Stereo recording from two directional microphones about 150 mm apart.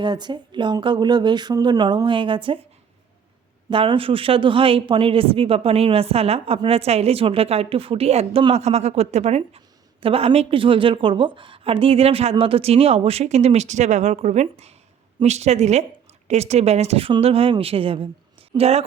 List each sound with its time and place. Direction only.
0.0 s speech: 30° right (ahead or behind)
3.7 s speech: 35° right (ahead or behind)